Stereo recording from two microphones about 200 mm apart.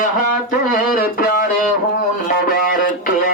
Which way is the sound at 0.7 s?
45° left (ahead or behind).